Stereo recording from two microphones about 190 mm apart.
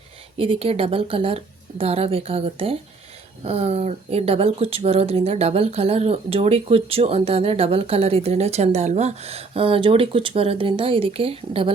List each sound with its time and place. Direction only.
0.3 s speech: 30° right (ahead or behind)